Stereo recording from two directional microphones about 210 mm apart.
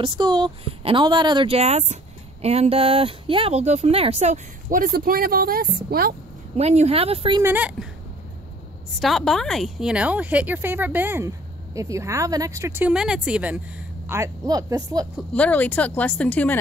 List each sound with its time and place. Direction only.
0.0 s speech: 20° right (ahead or behind); by 6.1 s 45° right (ahead or behind)
6.5 s speech: 30° right (ahead or behind)
7.4 s a woman's voice: 10° right (ahead or behind)
9.0 s a woman's voice: centre (ahead or behind); by 15.0 s 20° right (ahead or behind)
15.3 s speech: 5° left (ahead or behind)